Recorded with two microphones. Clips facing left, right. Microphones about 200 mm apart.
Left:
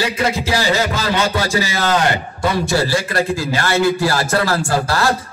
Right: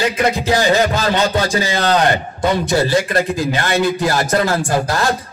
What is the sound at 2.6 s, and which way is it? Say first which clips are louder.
A man's voice: right 2 dB; 20° right (ahead or behind).